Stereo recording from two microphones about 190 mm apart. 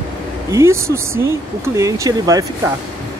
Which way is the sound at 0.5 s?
15° right (ahead or behind).